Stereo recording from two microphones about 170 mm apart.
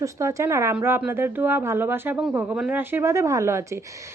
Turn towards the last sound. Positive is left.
turn(degrees=-15)  # may be behind; listen again after turning